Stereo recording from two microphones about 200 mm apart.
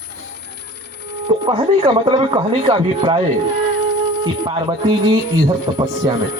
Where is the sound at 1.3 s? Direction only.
25° right (ahead or behind).